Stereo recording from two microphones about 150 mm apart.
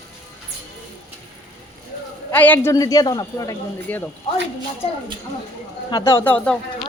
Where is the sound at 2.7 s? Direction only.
25° left (ahead or behind).